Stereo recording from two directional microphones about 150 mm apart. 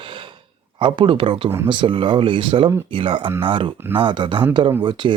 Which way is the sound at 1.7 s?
35° right (ahead or behind).